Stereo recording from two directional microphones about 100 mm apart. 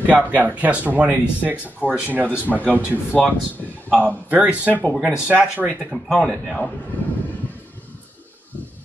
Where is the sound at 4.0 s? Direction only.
15° right (ahead or behind).